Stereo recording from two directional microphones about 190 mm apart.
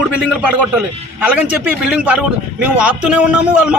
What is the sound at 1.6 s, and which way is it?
A man's voice, 5° right (ahead or behind).